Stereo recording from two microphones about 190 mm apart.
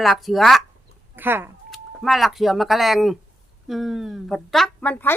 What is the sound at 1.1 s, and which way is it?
Speech, 10° right (ahead or behind).